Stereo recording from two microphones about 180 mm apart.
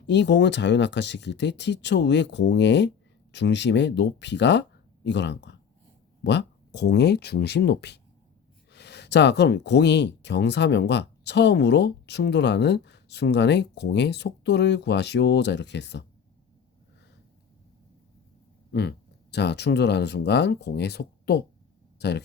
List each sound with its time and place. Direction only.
0.1 s speech: 75° left (ahead or behind)
18.7 s speech: 65° left (ahead or behind)